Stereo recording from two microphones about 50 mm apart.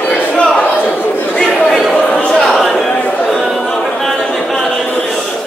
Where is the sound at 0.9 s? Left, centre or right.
Left.